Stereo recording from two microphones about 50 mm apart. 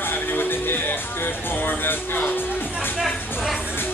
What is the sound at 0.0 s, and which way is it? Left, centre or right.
Music, left.